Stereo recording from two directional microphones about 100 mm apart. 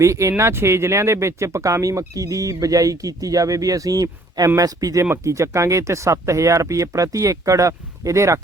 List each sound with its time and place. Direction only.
0.0 s speech: 30° right (ahead or behind)
5.0 s speech: 25° right (ahead or behind)